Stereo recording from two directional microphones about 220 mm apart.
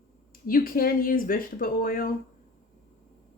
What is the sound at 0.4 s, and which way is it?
Speech, 40° left (ahead or behind).